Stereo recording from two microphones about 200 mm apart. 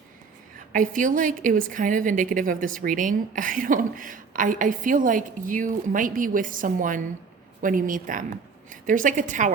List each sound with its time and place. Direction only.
0.7 s speech: 40° right (ahead or behind)